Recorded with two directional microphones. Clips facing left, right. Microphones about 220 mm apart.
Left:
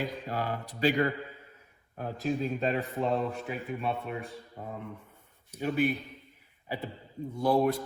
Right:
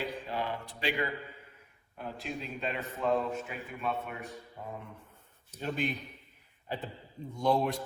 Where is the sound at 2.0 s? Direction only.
40° left (ahead or behind).